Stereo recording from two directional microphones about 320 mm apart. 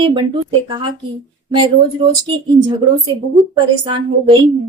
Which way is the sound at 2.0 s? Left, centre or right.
Centre.